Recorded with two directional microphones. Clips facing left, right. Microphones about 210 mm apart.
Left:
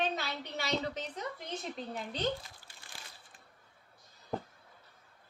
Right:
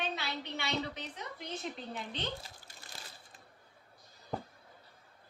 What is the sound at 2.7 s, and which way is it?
Crushing, 40° right (ahead or behind).